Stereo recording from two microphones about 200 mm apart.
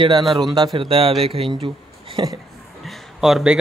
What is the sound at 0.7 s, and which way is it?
Speech, 25° right (ahead or behind).